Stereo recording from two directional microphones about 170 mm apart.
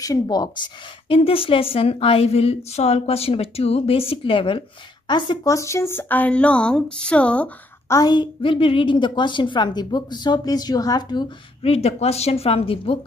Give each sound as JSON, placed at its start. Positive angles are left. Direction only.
{"t": 0.0, "sound": "a woman's voice", "side_deg": 20}
{"t": 7.9, "sound": "a woman's voice", "side_deg": 25}